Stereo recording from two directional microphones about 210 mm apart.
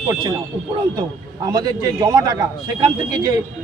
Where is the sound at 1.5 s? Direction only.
20° right (ahead or behind).